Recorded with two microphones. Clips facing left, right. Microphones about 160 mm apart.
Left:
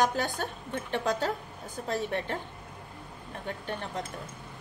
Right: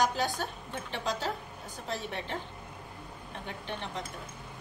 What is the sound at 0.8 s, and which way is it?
Speech, 50° left (ahead or behind).